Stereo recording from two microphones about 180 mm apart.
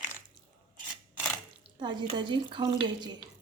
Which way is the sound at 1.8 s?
25° right (ahead or behind).